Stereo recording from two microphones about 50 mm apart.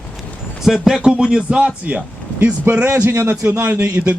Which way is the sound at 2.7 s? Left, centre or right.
Right.